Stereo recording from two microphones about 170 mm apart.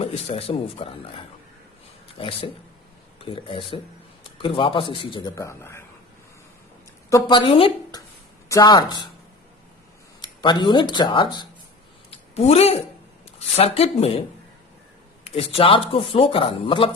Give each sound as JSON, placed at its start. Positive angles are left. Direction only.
{"t": 0.0, "sound": "speech", "side_deg": 35}
{"t": 2.1, "sound": "speech", "side_deg": 35}
{"t": 5.3, "sound": "speech", "side_deg": 15}
{"t": 7.1, "sound": "speech", "side_deg": 25}
{"t": 10.2, "sound": "speech", "side_deg": 25}
{"t": 12.1, "sound": "a sound", "side_deg": 40}
{"t": 13.6, "sound": "speech", "side_deg": 35}
{"t": 15.2, "sound": "speech", "side_deg": 35}